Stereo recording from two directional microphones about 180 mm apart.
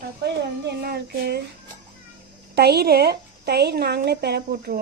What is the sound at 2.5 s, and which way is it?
A woman's voice, 60° right (ahead or behind).